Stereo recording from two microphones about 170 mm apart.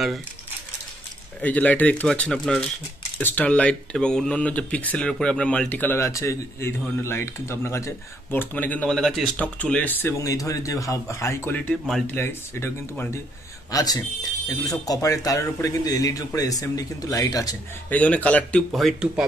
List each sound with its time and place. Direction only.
1.4 s speech: 10° left (ahead or behind)
17.8 s speech: 10° left (ahead or behind)